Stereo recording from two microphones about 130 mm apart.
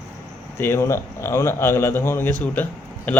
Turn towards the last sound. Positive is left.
turn(degrees=15)  # may be behind; listen again after turning